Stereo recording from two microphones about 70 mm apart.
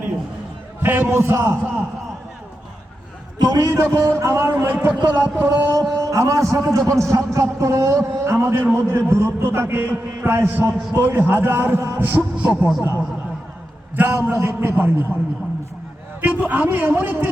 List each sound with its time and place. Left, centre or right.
0.8 s a man's voice: right
3.3 s a man's voice: right
3.7 s a man's voice: right
12.4 s speech: centre
13.9 s a sound: right
14.3 s a man's voice: right
16.2 s a man's voice: right